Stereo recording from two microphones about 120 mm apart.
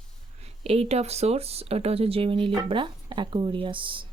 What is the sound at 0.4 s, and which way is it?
Speech, 55° right (ahead or behind).